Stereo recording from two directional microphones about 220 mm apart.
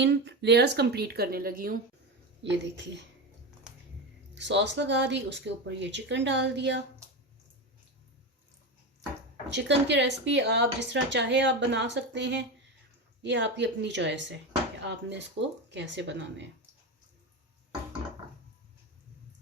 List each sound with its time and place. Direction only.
0.0 s speech: 50° right (ahead or behind)
2.4 s speech: 55° right (ahead or behind)
4.4 s speech: 55° right (ahead or behind)
9.5 s speech: 55° right (ahead or behind)
15.4 s speech: 55° right (ahead or behind)